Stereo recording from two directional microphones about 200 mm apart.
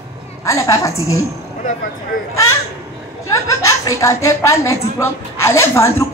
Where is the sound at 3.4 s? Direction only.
15° left (ahead or behind).